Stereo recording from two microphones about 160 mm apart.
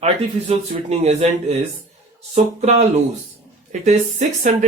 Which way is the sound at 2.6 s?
45° right (ahead or behind).